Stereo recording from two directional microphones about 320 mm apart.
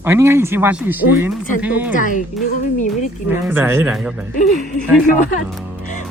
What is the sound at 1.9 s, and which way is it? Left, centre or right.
Speech, left.